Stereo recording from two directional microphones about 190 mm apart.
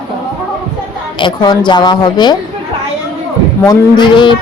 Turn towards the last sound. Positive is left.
turn(degrees=25)  # may be behind; listen again after turning